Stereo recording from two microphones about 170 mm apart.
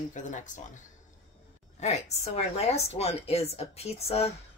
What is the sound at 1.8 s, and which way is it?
A woman's voice, 40° left (ahead or behind).